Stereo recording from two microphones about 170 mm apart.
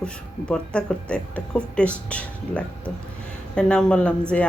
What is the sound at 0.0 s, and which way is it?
A woman's voice, 5° left (ahead or behind).